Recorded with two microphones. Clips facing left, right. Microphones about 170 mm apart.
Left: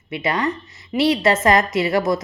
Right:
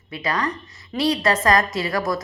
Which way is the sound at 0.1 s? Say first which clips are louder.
Left 3 dB; 25° left (ahead or behind).